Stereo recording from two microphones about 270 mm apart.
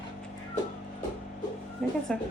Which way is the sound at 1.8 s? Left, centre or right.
Centre.